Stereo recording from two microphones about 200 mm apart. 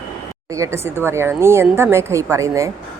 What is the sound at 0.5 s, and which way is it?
A woman's voice, 15° right (ahead or behind).